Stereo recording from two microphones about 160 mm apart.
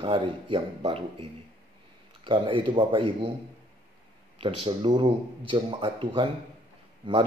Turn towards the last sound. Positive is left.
turn(degrees=-30)  # may be behind; listen again after turning